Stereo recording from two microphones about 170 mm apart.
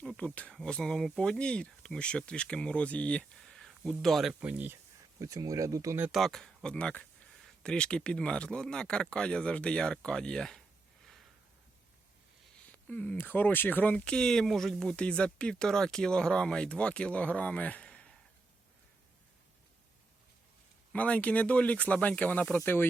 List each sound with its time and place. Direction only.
0.0 s speech: 5° left (ahead or behind); by 6.1 s 15° right (ahead or behind)
6.1 s speech: centre (ahead or behind)
12.9 s speech: 10° left (ahead or behind)
20.9 s speech: 10° left (ahead or behind)